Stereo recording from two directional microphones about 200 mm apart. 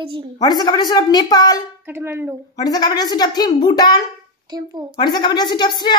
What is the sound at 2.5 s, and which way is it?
A woman's voice, 20° left (ahead or behind).